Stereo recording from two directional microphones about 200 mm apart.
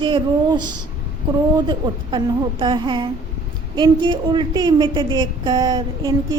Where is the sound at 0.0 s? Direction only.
25° right (ahead or behind).